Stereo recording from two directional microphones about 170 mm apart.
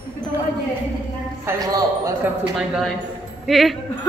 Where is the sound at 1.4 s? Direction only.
20° right (ahead or behind).